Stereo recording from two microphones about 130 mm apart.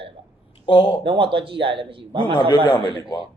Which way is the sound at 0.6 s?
45° left (ahead or behind).